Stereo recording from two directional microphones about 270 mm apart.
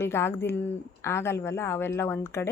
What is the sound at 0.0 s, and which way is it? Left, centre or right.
Speech, centre.